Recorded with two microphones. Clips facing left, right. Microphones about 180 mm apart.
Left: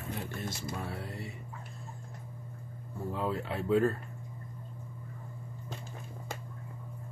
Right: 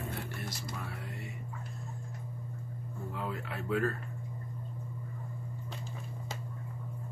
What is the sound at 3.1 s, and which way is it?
Speech, 30° left (ahead or behind).